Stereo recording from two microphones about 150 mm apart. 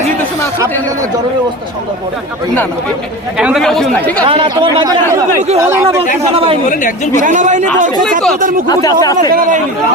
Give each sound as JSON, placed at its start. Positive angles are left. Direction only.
{"t": 3.3, "sound": "speech", "side_deg": -5}
{"t": 4.3, "sound": "speech", "side_deg": -35}
{"t": 5.5, "sound": "speech", "side_deg": -15}
{"t": 7.2, "sound": "a man's voice", "side_deg": -55}
{"t": 8.6, "sound": "speech", "side_deg": 25}
{"t": 9.3, "sound": "a man's voice", "side_deg": -65}